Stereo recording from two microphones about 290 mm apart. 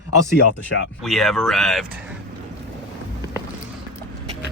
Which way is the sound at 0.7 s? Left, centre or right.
Left.